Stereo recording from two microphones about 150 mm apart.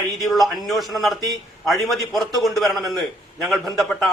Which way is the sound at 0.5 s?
Centre (ahead or behind).